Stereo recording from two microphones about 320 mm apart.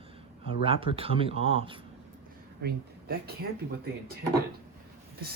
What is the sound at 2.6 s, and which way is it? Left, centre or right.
Speech, right.